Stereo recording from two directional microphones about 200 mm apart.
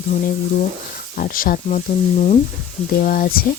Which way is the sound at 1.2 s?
45° left (ahead or behind).